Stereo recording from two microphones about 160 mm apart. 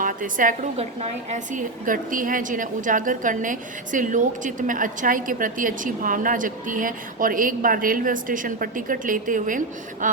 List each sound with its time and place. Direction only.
0.0 s a woman's voice: 55° right (ahead or behind)
0.8 s a woman's voice: 45° right (ahead or behind)